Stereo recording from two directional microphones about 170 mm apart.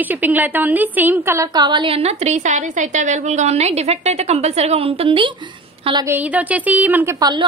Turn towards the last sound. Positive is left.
turn(degrees=-25)  # may be behind; listen again after turning